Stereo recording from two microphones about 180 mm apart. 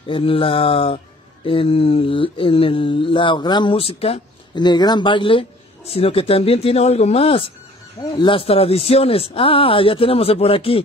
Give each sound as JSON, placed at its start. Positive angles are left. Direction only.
{"t": 0.0, "sound": "mantra", "side_deg": 30}